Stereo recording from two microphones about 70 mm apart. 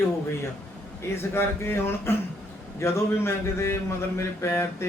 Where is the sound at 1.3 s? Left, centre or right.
Left.